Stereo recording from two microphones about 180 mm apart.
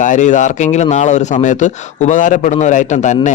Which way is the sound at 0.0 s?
45° left (ahead or behind).